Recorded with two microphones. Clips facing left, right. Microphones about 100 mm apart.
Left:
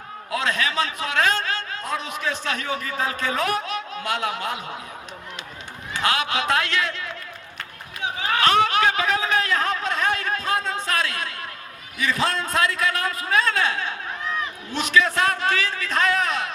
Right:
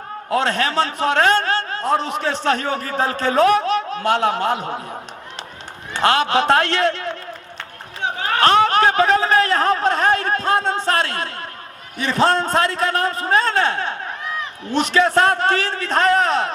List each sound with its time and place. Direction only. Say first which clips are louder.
0.3 s a man's voice: right 5 dB; 35° right (ahead or behind)
5.9 s a man's voice: right 7 dB; 35° right (ahead or behind)
8.0 s a sound: right 4 dB; 45° right (ahead or behind)
11.9 s a man's voice: right 7 dB; 30° right (ahead or behind)